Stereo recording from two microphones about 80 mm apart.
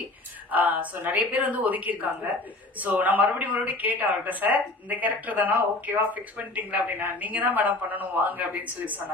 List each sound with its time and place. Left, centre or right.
0.5 s speech: right